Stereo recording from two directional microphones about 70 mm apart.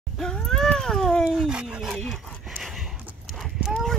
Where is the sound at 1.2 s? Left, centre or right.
Centre.